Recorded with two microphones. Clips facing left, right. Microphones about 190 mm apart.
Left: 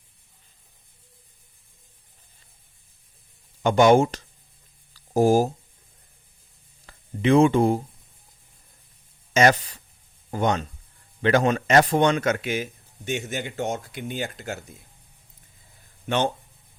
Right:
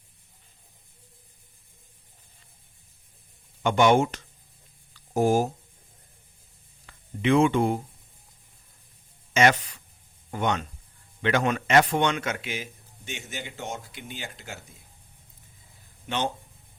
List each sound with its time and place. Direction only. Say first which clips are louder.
3.6 s a man's voice: left 4 dB; 40° left (ahead or behind)
4.9 s a sound: left 4 dB; 35° left (ahead or behind)
6.8 s speech: left 3 dB; 35° left (ahead or behind)
9.3 s a man's voice: left 3 dB; 40° left (ahead or behind)
16.0 s speech: left 5 dB; 55° left (ahead or behind)